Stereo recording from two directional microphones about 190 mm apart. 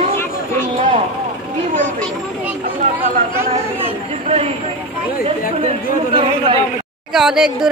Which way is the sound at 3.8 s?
30° right (ahead or behind).